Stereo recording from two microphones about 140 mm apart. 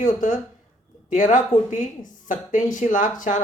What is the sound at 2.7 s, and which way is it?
Speech, 65° left (ahead or behind).